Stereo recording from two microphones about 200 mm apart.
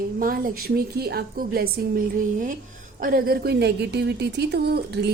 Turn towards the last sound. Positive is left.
turn(degrees=-55)  # may be behind; listen again after turning